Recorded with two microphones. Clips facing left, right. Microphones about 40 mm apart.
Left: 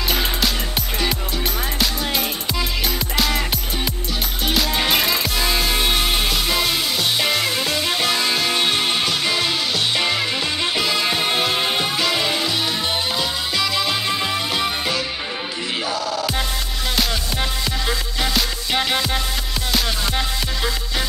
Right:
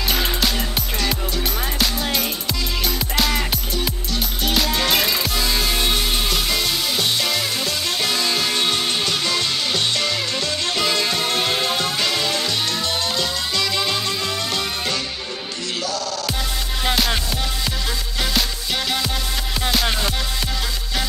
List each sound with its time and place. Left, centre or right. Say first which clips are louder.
0.1 s music: even; centre
1.8 s music: even; centre
10.8 s music: right 2 dB; centre
11.1 s music: left 1 dB; centre
13.6 s music: left 1 dB; centre
14.0 s music: left 2 dB; centre
18.8 s music: left 3 dB; centre